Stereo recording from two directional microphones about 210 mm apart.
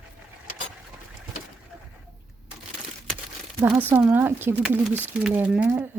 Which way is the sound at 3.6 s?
5° right (ahead or behind).